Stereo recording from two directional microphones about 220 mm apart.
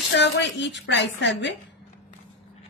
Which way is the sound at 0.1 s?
50° left (ahead or behind).